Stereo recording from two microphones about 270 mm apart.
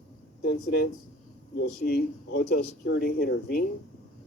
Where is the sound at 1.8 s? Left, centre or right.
Left.